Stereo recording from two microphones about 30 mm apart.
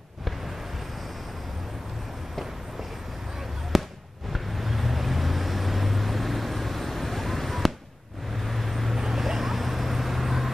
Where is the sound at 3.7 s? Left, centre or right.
Centre.